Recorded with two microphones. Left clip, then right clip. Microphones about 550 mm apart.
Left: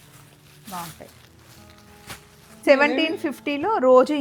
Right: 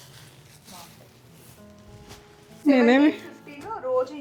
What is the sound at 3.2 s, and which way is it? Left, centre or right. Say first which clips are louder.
Speech: left 14 dB; left.